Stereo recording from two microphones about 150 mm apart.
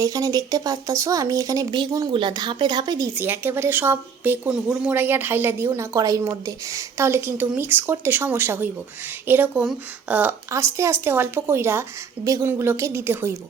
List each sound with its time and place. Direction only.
0.0 s speech: 25° right (ahead or behind)
3.2 s speech: 15° right (ahead or behind)